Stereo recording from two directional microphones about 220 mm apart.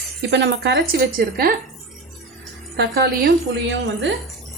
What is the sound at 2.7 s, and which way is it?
A woman's voice, 50° right (ahead or behind).